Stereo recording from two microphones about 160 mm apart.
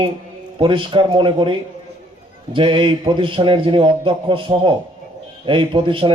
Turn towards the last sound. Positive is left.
turn(degrees=-30)  # may be behind; listen again after turning